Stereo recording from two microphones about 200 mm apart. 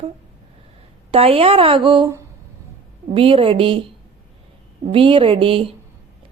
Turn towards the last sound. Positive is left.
turn(degrees=-25)  # may be behind; listen again after turning